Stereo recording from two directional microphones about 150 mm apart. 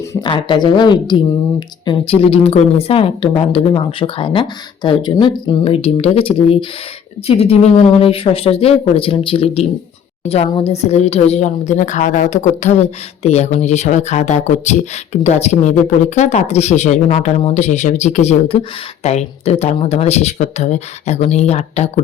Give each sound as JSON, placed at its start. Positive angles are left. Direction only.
{"t": 0.1, "sound": "a woman's voice", "side_deg": 30}